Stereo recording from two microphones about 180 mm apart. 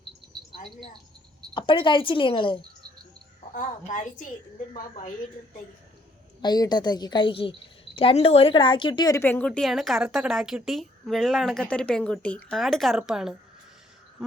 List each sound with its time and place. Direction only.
1.5 s a woman's voice: 30° left (ahead or behind)
3.5 s a woman's voice: 45° left (ahead or behind)
6.4 s a woman's voice: 25° left (ahead or behind); by 13.3 s 5° right (ahead or behind)
14.2 s a sound: centre (ahead or behind)